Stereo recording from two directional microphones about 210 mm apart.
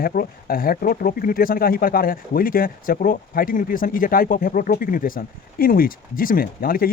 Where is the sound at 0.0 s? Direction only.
45° left (ahead or behind).